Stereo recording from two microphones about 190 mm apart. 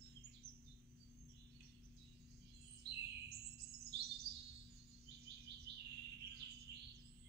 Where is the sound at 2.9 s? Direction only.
65° right (ahead or behind).